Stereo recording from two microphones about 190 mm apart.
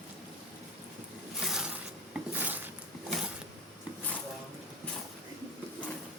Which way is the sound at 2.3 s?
10° right (ahead or behind).